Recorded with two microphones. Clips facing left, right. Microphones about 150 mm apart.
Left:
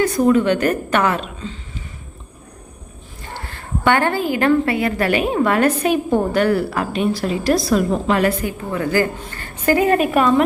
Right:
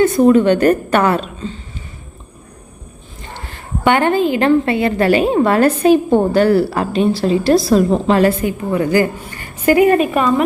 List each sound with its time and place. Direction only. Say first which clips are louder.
0.0 s a woman's voice: right 5 dB; 25° right (ahead or behind)
3.3 s a woman's voice: even; 20° right (ahead or behind)
10.0 s a woman's voice: even; centre (ahead or behind)